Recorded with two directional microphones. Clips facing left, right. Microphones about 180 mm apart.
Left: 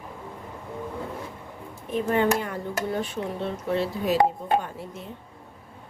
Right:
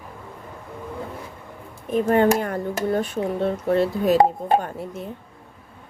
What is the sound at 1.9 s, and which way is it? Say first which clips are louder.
Speech: right 5 dB; 45° right (ahead or behind).